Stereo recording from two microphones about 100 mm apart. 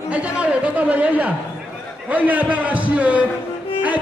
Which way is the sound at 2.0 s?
15° right (ahead or behind).